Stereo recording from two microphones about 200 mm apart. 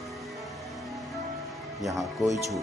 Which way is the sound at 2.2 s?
15° right (ahead or behind).